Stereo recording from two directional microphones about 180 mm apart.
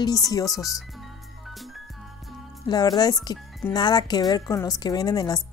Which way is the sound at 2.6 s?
25° left (ahead or behind).